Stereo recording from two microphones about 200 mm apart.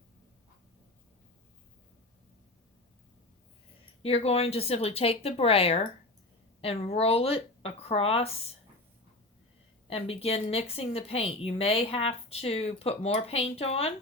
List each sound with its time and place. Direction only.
4.0 s speech: 30° left (ahead or behind)
9.9 s speech: 30° left (ahead or behind)